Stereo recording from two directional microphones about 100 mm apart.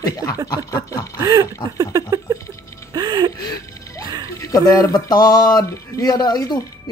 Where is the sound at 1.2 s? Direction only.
40° right (ahead or behind).